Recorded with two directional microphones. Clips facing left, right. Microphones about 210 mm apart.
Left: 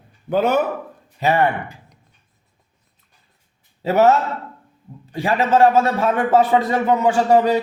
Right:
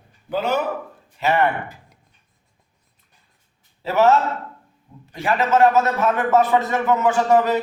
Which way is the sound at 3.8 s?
40° left (ahead or behind).